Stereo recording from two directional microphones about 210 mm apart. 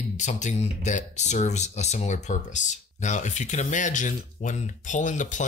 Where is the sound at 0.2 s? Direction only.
35° left (ahead or behind).